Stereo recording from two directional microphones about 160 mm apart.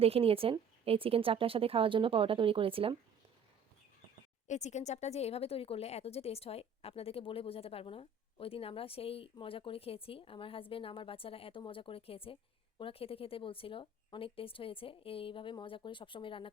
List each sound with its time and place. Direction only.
0.0 s speech: 35° right (ahead or behind)
4.4 s a woman's voice: 45° left (ahead or behind)